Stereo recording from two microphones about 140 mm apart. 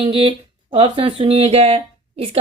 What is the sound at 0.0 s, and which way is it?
A woman's voice, 40° right (ahead or behind).